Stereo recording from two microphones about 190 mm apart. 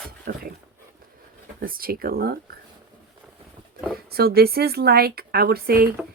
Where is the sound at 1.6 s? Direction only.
50° right (ahead or behind).